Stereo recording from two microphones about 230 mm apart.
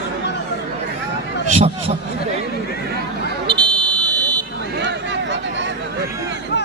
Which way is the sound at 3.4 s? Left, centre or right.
Centre.